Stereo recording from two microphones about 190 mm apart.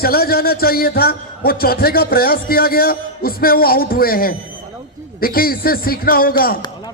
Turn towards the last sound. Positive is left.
turn(degrees=50)  # may be behind; listen again after turning